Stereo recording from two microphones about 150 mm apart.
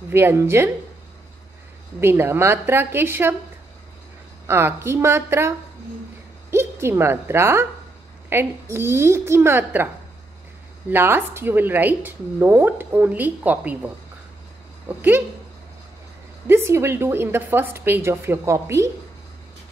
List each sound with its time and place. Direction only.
0.1 s a woman's voice: 15° right (ahead or behind)
2.0 s a woman's voice: 15° right (ahead or behind)
4.5 s a woman's voice: 15° right (ahead or behind)
6.5 s a woman's voice: 15° right (ahead or behind)
10.9 s a woman's voice: 15° right (ahead or behind)
16.4 s a woman's voice: 15° right (ahead or behind)